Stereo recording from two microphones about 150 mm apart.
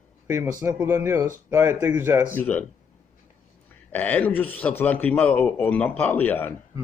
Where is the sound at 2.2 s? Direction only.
15° left (ahead or behind).